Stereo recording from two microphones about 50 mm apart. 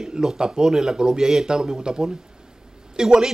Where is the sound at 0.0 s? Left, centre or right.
Centre.